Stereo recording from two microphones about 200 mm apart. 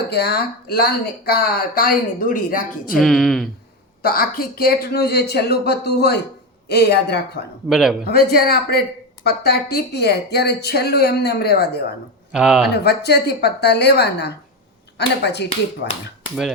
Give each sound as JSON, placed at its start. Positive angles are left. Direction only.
{"t": 0.1, "sound": "speech", "side_deg": 50}
{"t": 3.0, "sound": "speech", "side_deg": 0}
{"t": 4.0, "sound": "speech", "side_deg": 50}
{"t": 7.7, "sound": "speech", "side_deg": 0}
{"t": 8.1, "sound": "speech", "side_deg": 50}
{"t": 12.3, "sound": "speech", "side_deg": -5}
{"t": 12.7, "sound": "a woman's voice", "side_deg": 55}